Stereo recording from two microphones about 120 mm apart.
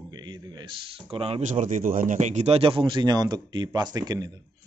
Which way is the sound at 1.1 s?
55° right (ahead or behind).